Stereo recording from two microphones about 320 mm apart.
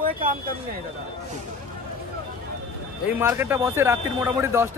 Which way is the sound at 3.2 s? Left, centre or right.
Centre.